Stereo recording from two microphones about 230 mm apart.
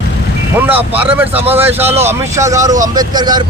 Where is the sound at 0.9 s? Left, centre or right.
Centre.